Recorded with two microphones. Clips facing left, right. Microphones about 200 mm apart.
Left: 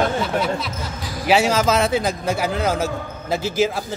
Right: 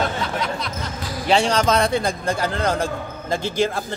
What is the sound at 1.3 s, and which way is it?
Speech, 5° left (ahead or behind).